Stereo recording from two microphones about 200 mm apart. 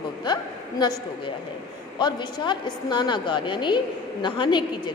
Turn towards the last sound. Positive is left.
turn(degrees=25)  # may be behind; listen again after turning